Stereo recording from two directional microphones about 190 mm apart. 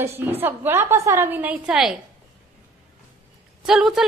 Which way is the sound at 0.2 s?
10° right (ahead or behind).